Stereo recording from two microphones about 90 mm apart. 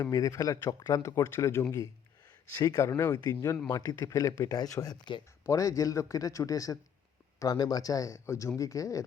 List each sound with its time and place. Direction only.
0.0 s speech: 40° left (ahead or behind)